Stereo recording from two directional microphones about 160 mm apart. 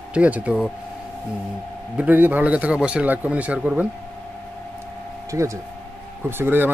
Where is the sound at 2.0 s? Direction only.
10° right (ahead or behind).